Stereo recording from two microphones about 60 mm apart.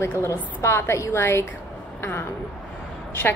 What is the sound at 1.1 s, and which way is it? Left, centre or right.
A woman's voice, left.